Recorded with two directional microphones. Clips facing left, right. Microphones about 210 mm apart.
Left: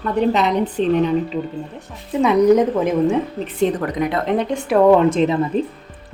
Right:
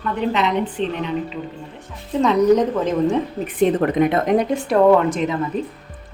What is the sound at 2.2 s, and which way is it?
Speech, 10° left (ahead or behind).